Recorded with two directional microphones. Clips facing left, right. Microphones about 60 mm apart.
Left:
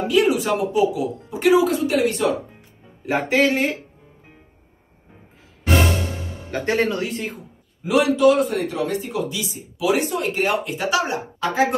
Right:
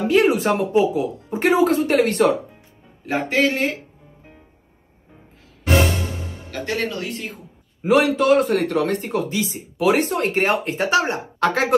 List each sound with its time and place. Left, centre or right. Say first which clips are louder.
0.1 s speech: right 1 dB; right
3.1 s speech: left 1 dB; centre
6.6 s speech: left 4 dB; left
7.8 s speech: left 1 dB; right
8.5 s speech: right 3 dB; right
11.3 s speech: even; right